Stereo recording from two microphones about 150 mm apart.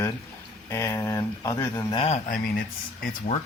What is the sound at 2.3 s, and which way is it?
Speech, 65° left (ahead or behind).